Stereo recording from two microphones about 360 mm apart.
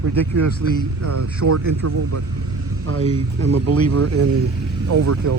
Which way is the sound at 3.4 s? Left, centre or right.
Right.